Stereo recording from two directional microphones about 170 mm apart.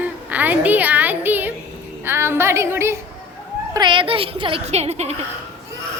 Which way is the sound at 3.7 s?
25° right (ahead or behind).